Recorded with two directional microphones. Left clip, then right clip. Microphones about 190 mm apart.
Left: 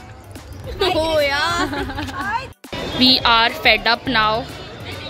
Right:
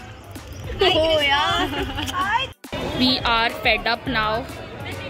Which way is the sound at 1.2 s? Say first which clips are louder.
Left 1 dB; 25° left (ahead or behind).